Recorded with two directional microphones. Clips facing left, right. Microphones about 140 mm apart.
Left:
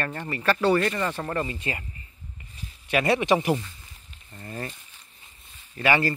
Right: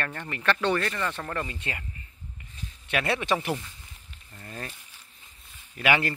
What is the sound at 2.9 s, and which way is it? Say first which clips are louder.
Speech: left 5 dB; 5° left (ahead or behind).